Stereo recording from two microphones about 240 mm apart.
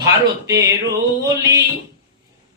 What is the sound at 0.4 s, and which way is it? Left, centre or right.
Speech, centre.